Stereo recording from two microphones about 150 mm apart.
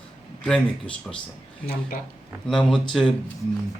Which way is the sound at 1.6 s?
90° left.